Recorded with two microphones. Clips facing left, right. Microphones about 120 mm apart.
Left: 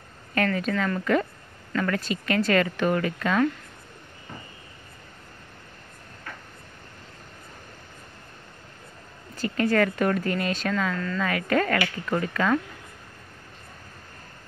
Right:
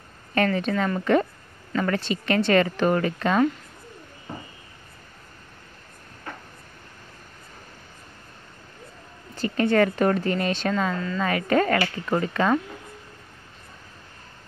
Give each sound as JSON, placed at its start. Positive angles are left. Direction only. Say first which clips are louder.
{"t": 0.3, "sound": "a woman's voice", "louder": "right 2 dB", "side_deg": -25}
{"t": 9.3, "sound": "a woman's voice", "louder": "right 2 dB", "side_deg": -25}